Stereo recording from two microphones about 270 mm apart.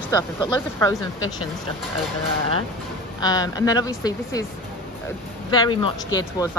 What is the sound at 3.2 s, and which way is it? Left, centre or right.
Speech, centre.